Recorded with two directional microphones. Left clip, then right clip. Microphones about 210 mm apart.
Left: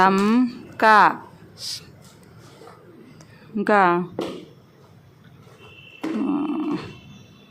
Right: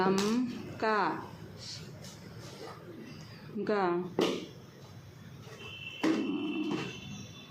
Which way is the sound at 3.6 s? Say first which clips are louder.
Left 14 dB; 40° left (ahead or behind).